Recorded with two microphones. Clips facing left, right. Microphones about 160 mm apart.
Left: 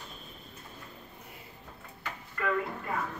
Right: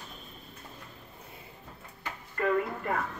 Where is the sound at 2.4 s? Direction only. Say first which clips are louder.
Right 4 dB; 45° right (ahead or behind).